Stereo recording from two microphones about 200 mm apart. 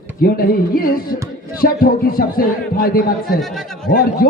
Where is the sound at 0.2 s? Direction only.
45° left (ahead or behind).